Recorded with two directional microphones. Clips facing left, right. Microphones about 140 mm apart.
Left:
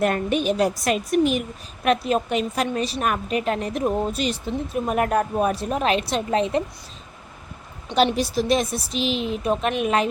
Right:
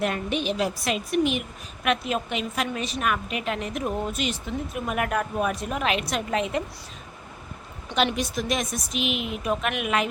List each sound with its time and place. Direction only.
0.0 s a woman's voice: 45° left (ahead or behind)
7.9 s a woman's voice: 35° left (ahead or behind)